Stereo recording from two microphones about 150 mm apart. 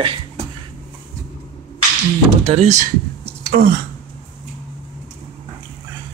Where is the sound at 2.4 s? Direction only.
45° right (ahead or behind).